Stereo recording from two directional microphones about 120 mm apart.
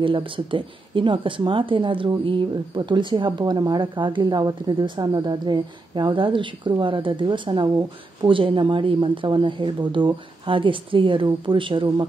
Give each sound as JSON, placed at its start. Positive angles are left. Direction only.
{"t": 0.0, "sound": "a woman's voice", "side_deg": -45}